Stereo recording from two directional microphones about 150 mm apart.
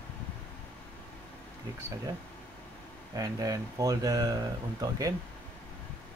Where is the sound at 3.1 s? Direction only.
25° right (ahead or behind).